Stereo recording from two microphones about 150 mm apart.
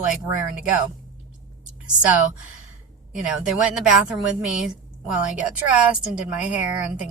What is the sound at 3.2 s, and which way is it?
A woman's voice, 5° right (ahead or behind).